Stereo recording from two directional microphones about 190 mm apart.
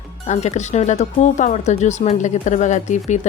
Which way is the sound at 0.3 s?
35° left (ahead or behind).